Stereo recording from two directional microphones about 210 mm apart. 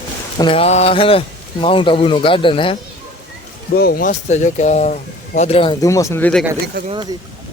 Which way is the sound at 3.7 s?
45° left (ahead or behind).